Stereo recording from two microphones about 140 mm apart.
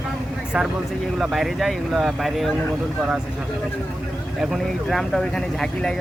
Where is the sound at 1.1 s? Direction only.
Centre (ahead or behind).